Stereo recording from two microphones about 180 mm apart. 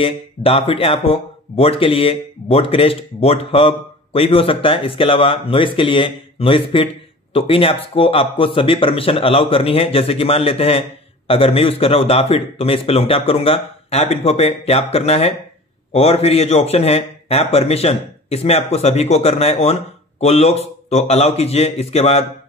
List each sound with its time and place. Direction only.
0.0 s speech: 35° left (ahead or behind)